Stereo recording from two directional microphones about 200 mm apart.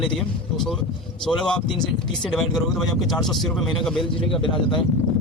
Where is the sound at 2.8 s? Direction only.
Centre (ahead or behind).